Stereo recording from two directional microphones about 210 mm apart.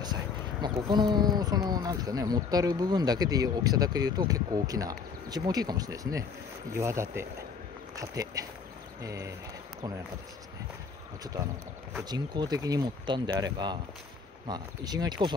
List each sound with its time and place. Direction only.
0.0 s speech: 20° right (ahead or behind)
11.9 s speech: 20° right (ahead or behind)